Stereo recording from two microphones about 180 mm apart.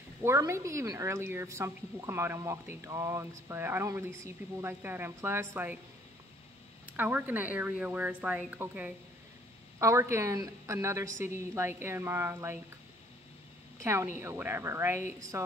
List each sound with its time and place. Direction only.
0.2 s a woman's voice: 15° right (ahead or behind)
6.9 s a woman's voice: 10° right (ahead or behind)
13.8 s a woman's voice: 15° right (ahead or behind)